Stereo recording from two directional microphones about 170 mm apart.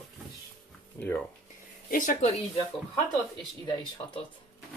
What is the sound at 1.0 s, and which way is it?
Speech, 20° left (ahead or behind).